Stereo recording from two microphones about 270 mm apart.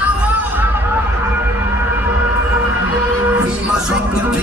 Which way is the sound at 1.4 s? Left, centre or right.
Centre.